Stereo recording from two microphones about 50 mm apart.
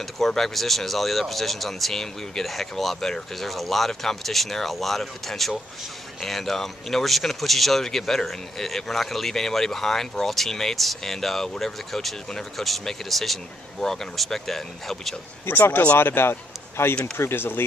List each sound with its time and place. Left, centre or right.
0.0 s speech: centre
15.4 s speech: left
16.0 s a man's voice: left